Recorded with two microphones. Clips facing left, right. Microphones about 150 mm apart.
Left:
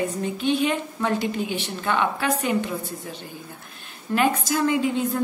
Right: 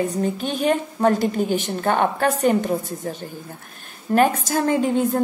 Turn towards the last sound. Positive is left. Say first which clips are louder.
# right 4 dB
turn(degrees=-45)  # may be behind; listen again after turning